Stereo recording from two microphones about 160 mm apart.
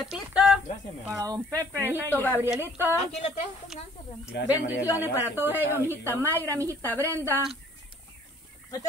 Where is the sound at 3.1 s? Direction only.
45° left (ahead or behind).